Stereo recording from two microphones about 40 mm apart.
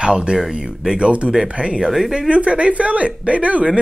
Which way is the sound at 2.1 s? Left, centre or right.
Right.